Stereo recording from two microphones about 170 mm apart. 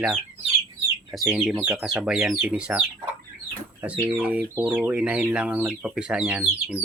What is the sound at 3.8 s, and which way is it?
Speech, 5° right (ahead or behind).